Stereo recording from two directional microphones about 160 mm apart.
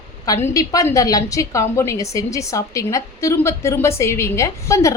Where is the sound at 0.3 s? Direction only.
20° left (ahead or behind).